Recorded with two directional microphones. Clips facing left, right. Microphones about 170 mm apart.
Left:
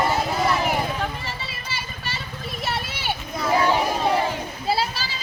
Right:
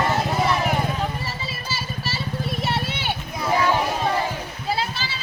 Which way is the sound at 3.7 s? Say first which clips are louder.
Left 1 dB; 15° left (ahead or behind).